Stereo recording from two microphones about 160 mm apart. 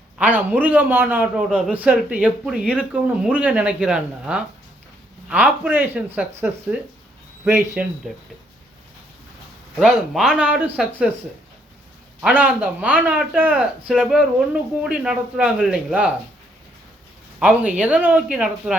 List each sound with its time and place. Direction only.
0.2 s a man's voice: 10° right (ahead or behind)
9.7 s speech: centre (ahead or behind)
12.2 s a man's voice: 10° right (ahead or behind)
17.4 s a man's voice: 10° right (ahead or behind)